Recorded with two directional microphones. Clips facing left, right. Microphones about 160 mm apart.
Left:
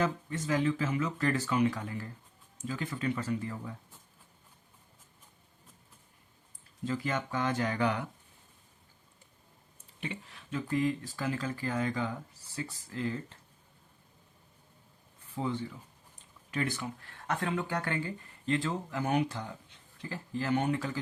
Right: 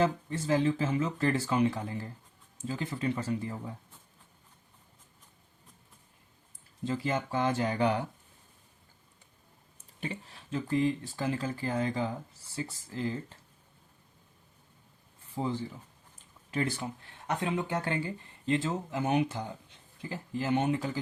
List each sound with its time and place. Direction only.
0.0 s speech: 30° right (ahead or behind)
6.8 s speech: 25° right (ahead or behind)
10.0 s speech: 35° right (ahead or behind)
15.4 s speech: 25° right (ahead or behind)